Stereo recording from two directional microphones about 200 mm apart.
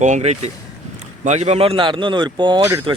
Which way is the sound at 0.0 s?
35° right (ahead or behind).